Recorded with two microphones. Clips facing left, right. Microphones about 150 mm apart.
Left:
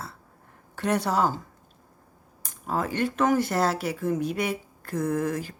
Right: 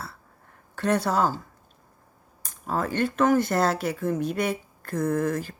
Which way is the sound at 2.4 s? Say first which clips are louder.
Right 1 dB; 15° left (ahead or behind).